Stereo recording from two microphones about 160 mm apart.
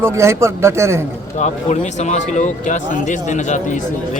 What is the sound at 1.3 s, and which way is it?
Speech, 45° left (ahead or behind).